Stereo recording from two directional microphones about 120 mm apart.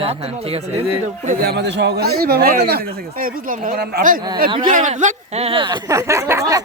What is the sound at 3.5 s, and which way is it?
Speech, 90° right.